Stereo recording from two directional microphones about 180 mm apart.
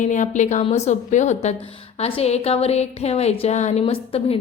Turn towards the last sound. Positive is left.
turn(degrees=35)  # may be behind; listen again after turning